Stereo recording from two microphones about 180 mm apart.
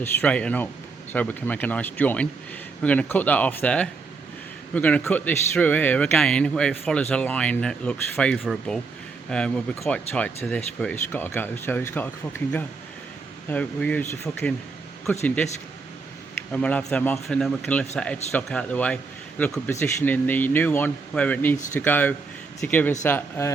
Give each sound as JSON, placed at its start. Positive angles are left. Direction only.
{"t": 0.0, "sound": "a man's voice", "side_deg": 10}
{"t": 16.5, "sound": "a man's voice", "side_deg": 5}